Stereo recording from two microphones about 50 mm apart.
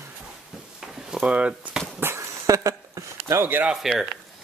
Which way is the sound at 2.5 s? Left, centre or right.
Right.